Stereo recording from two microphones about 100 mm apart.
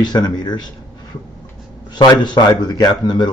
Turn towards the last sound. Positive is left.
turn(degrees=45)  # may be behind; listen again after turning